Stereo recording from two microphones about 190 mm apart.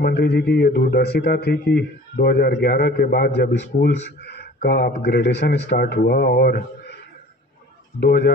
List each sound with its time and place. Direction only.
0.0 s speech: 55° left (ahead or behind)
8.0 s speech: 65° left (ahead or behind)